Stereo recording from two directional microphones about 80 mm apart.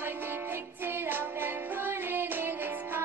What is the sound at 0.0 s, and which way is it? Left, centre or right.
Music, right.